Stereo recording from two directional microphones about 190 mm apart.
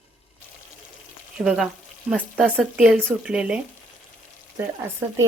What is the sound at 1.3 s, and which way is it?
Speech, 5° right (ahead or behind).